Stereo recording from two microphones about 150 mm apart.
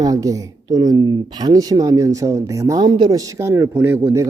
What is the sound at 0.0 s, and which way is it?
A woman's voice, 25° right (ahead or behind).